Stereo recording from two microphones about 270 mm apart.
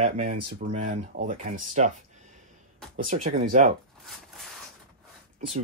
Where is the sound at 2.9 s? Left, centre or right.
Right.